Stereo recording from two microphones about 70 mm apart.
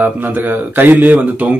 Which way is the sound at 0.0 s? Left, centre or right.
Right.